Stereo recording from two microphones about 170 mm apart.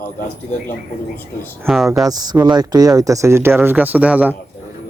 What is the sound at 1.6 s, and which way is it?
Speech, centre (ahead or behind).